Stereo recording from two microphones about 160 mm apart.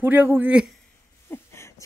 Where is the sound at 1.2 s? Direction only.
15° left (ahead or behind).